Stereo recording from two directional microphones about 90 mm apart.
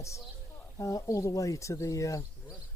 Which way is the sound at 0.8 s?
35° left (ahead or behind).